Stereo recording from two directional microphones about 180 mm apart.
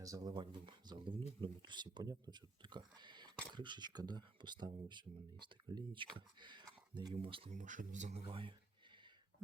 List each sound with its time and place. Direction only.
0.0 s speech: 20° right (ahead or behind)
7.5 s speech: 45° right (ahead or behind)